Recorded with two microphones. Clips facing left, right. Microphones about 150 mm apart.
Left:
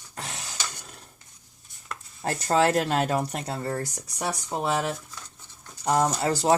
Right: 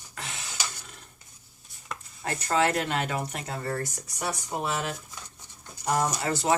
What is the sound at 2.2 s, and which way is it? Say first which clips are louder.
Speech: left 3 dB; 35° left (ahead or behind).